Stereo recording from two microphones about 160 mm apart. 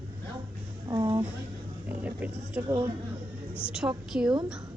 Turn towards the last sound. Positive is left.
turn(degrees=-5)  # may be behind; listen again after turning